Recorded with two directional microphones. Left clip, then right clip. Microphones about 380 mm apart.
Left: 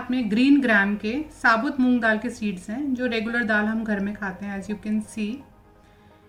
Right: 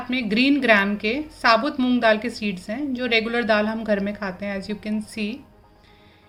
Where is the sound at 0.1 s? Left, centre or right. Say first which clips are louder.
Even; right.